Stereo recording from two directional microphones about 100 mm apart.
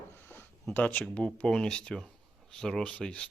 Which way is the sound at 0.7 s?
15° left (ahead or behind).